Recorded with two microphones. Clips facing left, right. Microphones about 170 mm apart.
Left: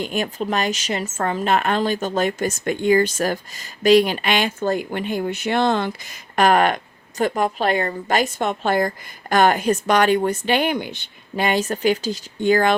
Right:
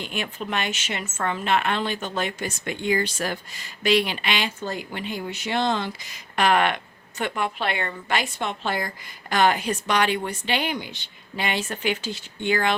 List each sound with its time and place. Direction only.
0.0 s a woman's voice: 40° left (ahead or behind)